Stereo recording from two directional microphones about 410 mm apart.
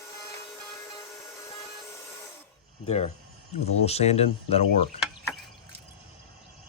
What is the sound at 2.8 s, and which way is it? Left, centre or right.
Speech, centre.